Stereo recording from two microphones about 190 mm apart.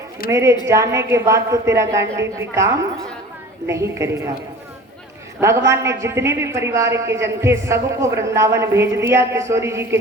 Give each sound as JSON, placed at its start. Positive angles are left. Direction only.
{"t": 0.3, "sound": "a woman's voice", "side_deg": -15}
{"t": 3.7, "sound": "a woman's voice", "side_deg": -15}
{"t": 5.4, "sound": "a woman's voice", "side_deg": -15}